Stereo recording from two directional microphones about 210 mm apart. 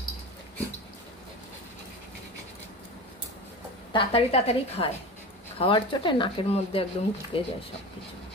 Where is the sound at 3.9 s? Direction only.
25° left (ahead or behind).